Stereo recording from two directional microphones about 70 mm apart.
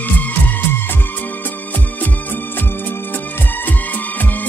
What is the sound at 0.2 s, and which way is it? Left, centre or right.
Music, left.